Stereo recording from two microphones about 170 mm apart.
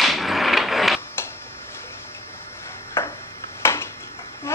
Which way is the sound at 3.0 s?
15° left (ahead or behind).